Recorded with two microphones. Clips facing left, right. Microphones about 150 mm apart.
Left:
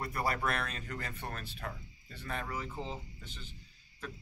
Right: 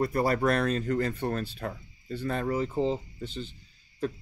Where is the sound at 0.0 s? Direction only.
30° right (ahead or behind).